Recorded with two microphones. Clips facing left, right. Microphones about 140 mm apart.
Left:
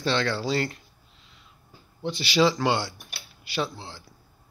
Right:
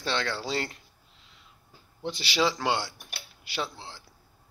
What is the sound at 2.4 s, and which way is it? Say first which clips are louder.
Speech: left 4 dB; 10° right (ahead or behind).